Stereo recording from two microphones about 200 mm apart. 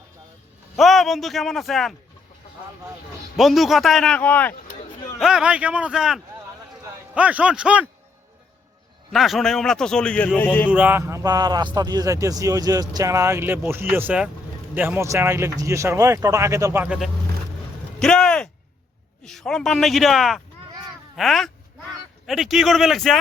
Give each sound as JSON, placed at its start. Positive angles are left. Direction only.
{"t": 0.8, "sound": "a man's voice", "side_deg": 0}
{"t": 3.3, "sound": "a man's voice", "side_deg": 0}
{"t": 5.2, "sound": "a man's voice", "side_deg": -5}
{"t": 9.1, "sound": "a man's voice", "side_deg": 0}
{"t": 10.7, "sound": "a man's voice", "side_deg": -10}
{"t": 18.0, "sound": "a man's voice", "side_deg": 5}